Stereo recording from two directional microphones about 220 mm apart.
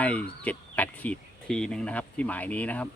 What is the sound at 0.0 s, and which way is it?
Speech, 5° left (ahead or behind).